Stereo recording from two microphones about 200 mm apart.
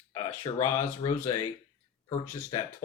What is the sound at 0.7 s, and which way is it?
Speech, 15° left (ahead or behind).